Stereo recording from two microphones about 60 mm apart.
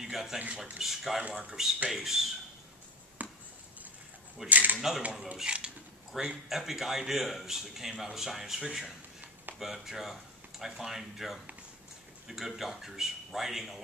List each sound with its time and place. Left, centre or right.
0.0 s a man's voice: centre
3.2 s a sound: right
4.5 s speech: right
4.7 s a man's voice: centre